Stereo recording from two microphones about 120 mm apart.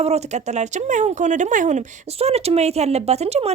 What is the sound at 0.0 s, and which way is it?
Speech, 65° right (ahead or behind).